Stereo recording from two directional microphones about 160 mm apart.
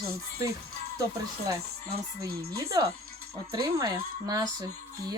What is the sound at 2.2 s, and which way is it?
Speech, 20° right (ahead or behind).